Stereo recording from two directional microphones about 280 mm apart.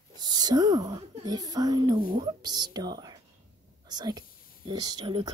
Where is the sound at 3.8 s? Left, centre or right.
Centre.